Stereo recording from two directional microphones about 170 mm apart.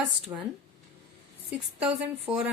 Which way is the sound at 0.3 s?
15° right (ahead or behind).